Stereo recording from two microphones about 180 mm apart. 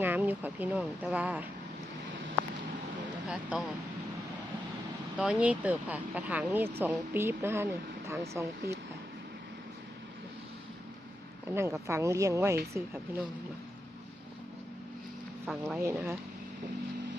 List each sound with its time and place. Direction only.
0.0 s speech: 10° right (ahead or behind)
3.2 s speech: 5° right (ahead or behind)
5.1 s speech: 5° right (ahead or behind)
11.5 s speech: 15° right (ahead or behind)
15.4 s speech: centre (ahead or behind)